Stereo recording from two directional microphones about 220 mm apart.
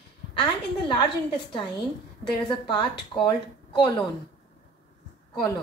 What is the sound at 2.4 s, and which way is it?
Speech, 20° left (ahead or behind).